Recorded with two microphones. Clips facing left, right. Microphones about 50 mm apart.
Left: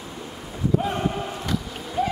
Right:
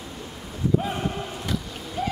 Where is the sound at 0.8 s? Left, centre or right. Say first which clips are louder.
Left 3 dB; centre.